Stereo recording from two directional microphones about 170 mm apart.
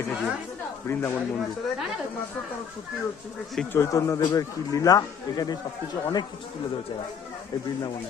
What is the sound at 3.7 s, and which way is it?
Speech, 15° left (ahead or behind).